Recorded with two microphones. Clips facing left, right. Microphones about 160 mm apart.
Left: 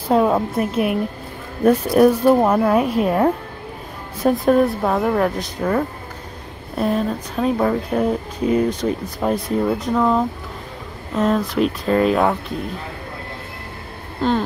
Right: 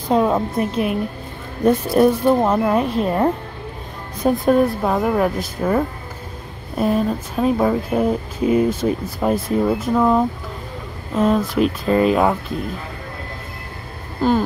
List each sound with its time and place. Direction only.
0.1 s a woman's voice: 5° left (ahead or behind)
2.0 s speech: 10° left (ahead or behind)
14.2 s speech: 5° right (ahead or behind)